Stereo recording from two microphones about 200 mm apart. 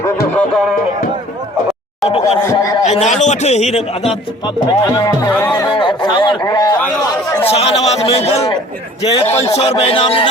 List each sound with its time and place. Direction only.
0.3 s speech: centre (ahead or behind)
2.0 s speech: 30° left (ahead or behind)
2.5 s a man's voice: 15° left (ahead or behind)
2.8 s a man's voice: 35° left (ahead or behind)
4.6 s speech: 20° left (ahead or behind)
5.5 s speech: 25° left (ahead or behind)
6.7 s speech: 5° left (ahead or behind)
7.4 s a man's voice: 30° left (ahead or behind)
9.6 s speech: 30° left (ahead or behind)